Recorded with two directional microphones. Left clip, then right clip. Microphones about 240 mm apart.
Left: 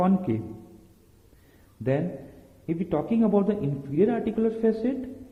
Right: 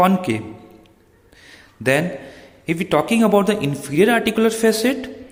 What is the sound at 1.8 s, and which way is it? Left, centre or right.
A man's voice, centre.